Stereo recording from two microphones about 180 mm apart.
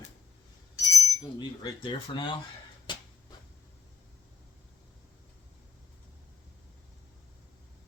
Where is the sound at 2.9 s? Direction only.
25° left (ahead or behind).